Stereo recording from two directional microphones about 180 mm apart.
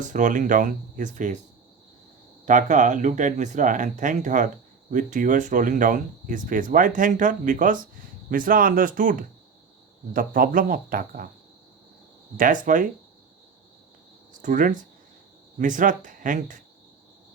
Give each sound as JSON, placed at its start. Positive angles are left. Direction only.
{"t": 0.0, "sound": "speech", "side_deg": -45}
{"t": 2.5, "sound": "speech", "side_deg": -45}
{"t": 12.4, "sound": "speech", "side_deg": -45}
{"t": 14.4, "sound": "speech", "side_deg": -45}